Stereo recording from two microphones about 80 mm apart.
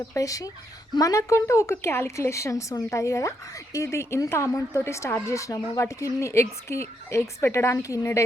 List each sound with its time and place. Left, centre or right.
0.1 s a woman's voice: left